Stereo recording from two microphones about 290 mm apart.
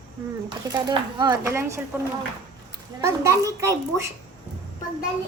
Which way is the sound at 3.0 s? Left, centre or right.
Centre.